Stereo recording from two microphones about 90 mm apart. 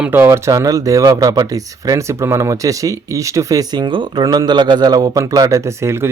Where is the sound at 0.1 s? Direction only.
25° right (ahead or behind).